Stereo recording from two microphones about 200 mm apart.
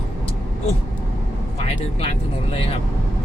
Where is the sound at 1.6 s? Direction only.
30° left (ahead or behind).